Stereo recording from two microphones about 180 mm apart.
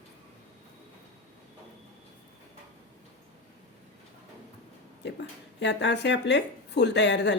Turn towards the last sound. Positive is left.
turn(degrees=75)  # may be behind; listen again after turning